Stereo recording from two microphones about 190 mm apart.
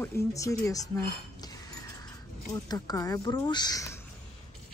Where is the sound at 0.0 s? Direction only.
15° left (ahead or behind).